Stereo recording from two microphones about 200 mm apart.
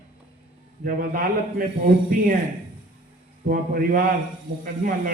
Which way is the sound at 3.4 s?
45° right (ahead or behind).